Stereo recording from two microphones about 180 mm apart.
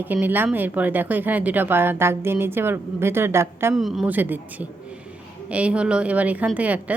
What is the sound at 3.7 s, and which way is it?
A woman's voice, centre (ahead or behind).